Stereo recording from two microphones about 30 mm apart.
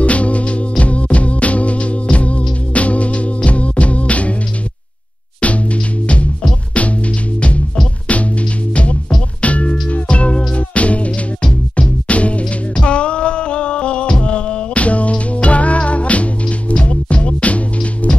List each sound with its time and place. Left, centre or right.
0.0 s music: left
5.4 s music: left
8.1 s music: left
12.1 s music: left
12.8 s music: left
14.8 s music: left